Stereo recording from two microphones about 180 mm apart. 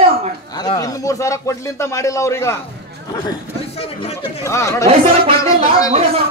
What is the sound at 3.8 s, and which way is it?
Speech, 35° left (ahead or behind).